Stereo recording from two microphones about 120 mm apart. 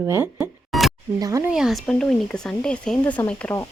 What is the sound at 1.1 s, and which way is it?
Speech, 30° right (ahead or behind).